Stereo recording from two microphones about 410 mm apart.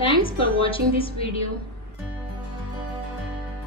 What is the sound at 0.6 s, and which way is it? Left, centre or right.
Speech, centre.